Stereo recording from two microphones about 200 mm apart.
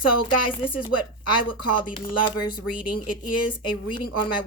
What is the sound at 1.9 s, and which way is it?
Speech, 25° left (ahead or behind).